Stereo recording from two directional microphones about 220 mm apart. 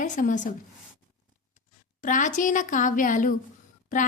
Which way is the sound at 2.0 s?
35° left (ahead or behind).